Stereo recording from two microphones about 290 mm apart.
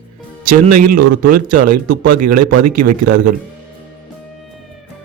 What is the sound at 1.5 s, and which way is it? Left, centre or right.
Speech, right.